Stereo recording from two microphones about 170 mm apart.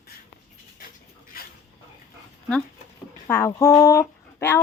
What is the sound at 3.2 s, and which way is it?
Speech, 15° left (ahead or behind).